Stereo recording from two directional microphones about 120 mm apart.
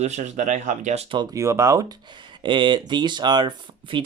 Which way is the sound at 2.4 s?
40° right (ahead or behind).